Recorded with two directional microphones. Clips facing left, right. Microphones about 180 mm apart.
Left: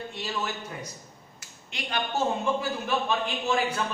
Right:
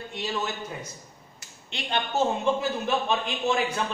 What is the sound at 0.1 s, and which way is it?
Speech, 20° right (ahead or behind).